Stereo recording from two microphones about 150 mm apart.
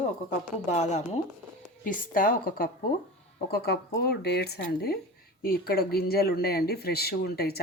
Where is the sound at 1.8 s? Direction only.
65° left (ahead or behind).